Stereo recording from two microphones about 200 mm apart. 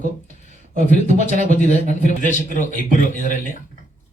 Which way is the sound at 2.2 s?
40° left (ahead or behind).